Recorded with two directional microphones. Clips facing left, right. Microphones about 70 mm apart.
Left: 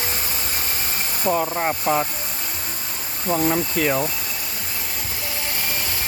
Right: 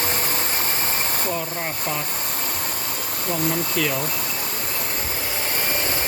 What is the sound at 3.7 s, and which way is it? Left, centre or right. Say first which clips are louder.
Speech: left 3 dB; left.